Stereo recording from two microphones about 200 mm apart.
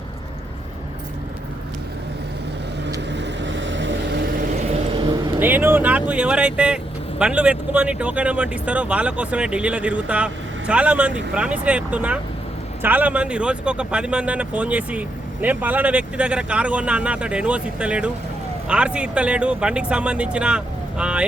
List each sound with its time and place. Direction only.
3.1 s vehicle: 60° right (ahead or behind)
5.4 s speech: 10° right (ahead or behind)